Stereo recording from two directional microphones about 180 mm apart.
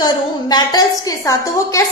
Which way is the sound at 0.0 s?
20° left (ahead or behind).